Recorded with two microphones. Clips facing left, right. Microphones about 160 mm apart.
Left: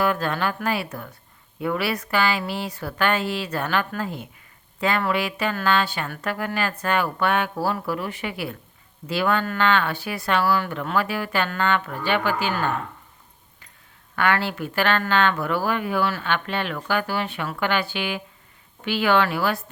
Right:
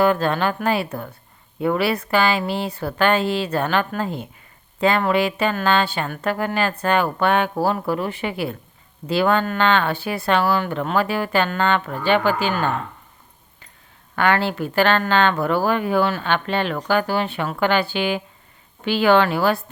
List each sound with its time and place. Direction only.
0.0 s speech: 30° right (ahead or behind)
14.2 s speech: 30° right (ahead or behind)